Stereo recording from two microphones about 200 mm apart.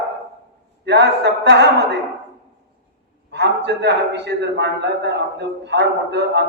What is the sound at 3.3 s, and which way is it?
A woman's voice, 60° right (ahead or behind).